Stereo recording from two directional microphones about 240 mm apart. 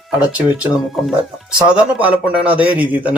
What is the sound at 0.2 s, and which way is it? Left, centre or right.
Speech, centre.